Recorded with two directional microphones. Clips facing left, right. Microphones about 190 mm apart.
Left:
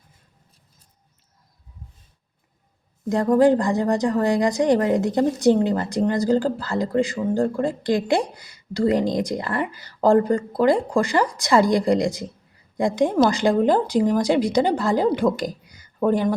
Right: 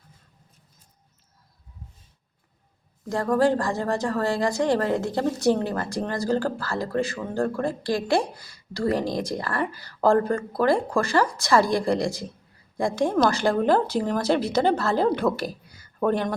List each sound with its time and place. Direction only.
3.1 s a woman's voice: 20° left (ahead or behind)